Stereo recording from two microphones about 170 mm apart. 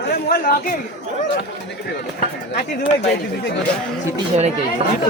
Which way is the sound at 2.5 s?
40° left (ahead or behind).